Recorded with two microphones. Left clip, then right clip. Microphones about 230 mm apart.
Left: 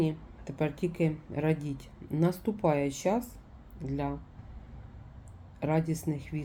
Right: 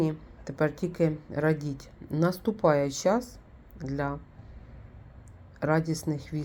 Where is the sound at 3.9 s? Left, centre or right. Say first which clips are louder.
Right 3 dB; right.